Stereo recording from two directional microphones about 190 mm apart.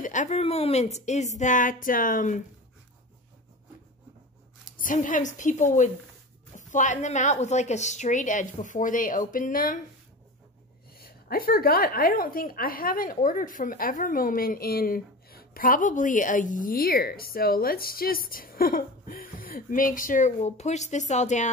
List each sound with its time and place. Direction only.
0.0 s a woman's voice: 40° left (ahead or behind)
4.7 s a woman's voice: 45° left (ahead or behind)
11.0 s a woman's voice: 50° left (ahead or behind)